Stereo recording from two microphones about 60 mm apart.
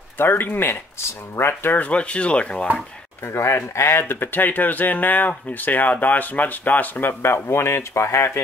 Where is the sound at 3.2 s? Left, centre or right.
Left.